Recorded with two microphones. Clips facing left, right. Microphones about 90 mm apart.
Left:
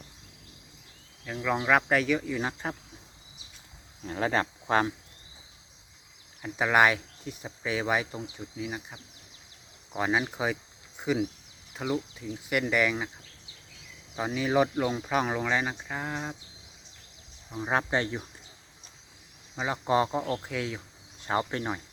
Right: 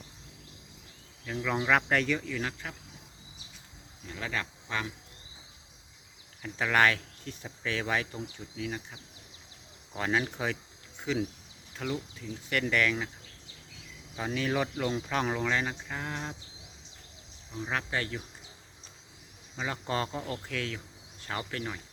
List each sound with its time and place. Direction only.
1.2 s speech: 5° left (ahead or behind); by 2.7 s 30° left (ahead or behind)
4.0 s speech: 40° left (ahead or behind)
6.4 s speech: 15° left (ahead or behind)
14.2 s speech: 10° left (ahead or behind)
17.5 s speech: 35° left (ahead or behind)
19.5 s speech: 15° left (ahead or behind)
20.4 s cricket: 15° left (ahead or behind)